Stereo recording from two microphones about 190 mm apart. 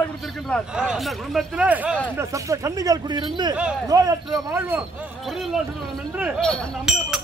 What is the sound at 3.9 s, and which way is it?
Speech, 20° right (ahead or behind).